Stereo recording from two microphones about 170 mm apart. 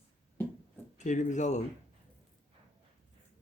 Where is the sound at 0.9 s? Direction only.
45° left (ahead or behind).